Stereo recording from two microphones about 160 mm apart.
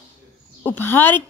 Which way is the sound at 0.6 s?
15° left (ahead or behind).